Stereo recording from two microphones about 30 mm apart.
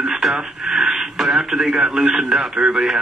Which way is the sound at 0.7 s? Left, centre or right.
Right.